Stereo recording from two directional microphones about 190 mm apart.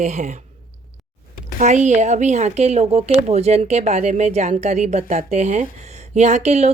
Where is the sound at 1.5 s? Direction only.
40° right (ahead or behind).